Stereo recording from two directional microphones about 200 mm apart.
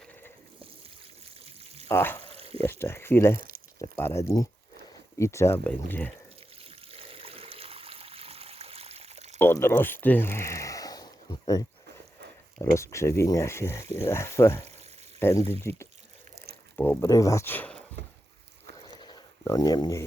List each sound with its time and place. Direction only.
0.0 s sheep: 10° left (ahead or behind)
1.5 s pour: 30° right (ahead or behind)
1.9 s speech: 10° left (ahead or behind)
2.2 s a sound: 30° right (ahead or behind)
2.6 s speech: 10° left (ahead or behind)
6.6 s trickle: 30° right (ahead or behind)
9.4 s speech: 10° left (ahead or behind)
12.7 s speech: 15° left (ahead or behind)
18.0 s a sound: 55° right (ahead or behind)
18.9 s a sound: 20° left (ahead or behind)